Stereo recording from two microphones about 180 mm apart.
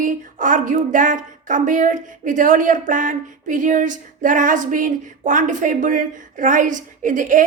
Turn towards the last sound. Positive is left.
turn(degrees=-45)  # may be behind; listen again after turning